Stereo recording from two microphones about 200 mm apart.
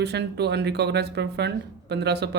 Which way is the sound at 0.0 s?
55° right (ahead or behind).